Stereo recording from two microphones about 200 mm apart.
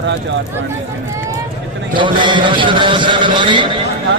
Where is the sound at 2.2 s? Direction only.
25° right (ahead or behind).